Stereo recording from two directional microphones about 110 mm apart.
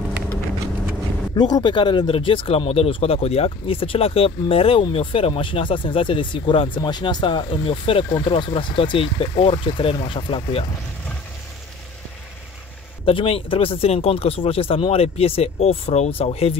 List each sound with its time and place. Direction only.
1.3 s speech: 40° left (ahead or behind)
13.0 s speech: 55° left (ahead or behind)